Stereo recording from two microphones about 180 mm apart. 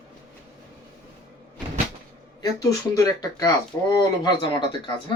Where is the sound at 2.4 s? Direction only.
20° left (ahead or behind).